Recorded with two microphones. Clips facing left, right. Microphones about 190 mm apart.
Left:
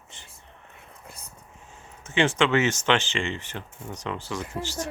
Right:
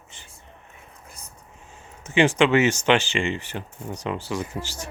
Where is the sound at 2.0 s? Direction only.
15° right (ahead or behind).